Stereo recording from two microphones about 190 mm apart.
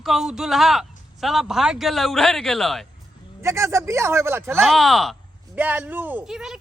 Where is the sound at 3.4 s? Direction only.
15° right (ahead or behind).